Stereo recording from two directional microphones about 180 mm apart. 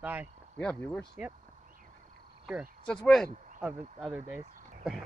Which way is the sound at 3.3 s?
45° right (ahead or behind).